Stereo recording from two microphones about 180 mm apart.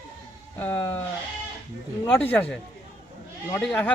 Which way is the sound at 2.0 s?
10° left (ahead or behind).